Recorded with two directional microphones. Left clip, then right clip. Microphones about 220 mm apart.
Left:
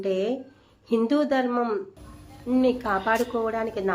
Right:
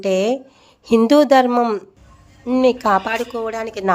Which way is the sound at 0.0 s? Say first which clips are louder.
Right 8 dB; 45° right (ahead or behind).